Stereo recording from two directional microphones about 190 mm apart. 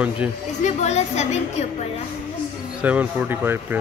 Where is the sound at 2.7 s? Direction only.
5° right (ahead or behind).